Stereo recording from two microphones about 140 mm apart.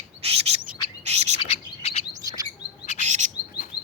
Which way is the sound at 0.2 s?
45° right (ahead or behind).